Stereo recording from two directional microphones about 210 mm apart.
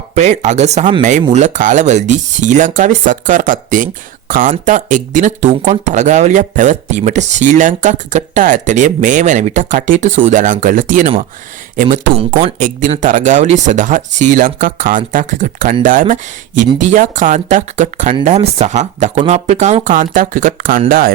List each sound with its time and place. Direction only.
0.1 s speech: 35° right (ahead or behind)